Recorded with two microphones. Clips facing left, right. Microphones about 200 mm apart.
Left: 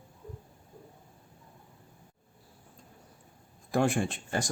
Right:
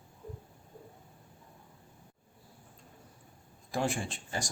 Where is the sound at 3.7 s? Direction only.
55° left (ahead or behind).